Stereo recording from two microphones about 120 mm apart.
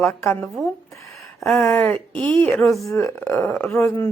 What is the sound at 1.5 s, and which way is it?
Speech, 25° left (ahead or behind).